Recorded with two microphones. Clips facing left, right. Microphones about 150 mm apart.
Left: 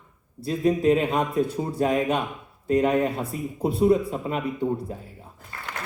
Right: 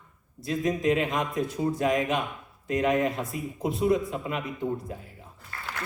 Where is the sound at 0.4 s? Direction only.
35° left (ahead or behind).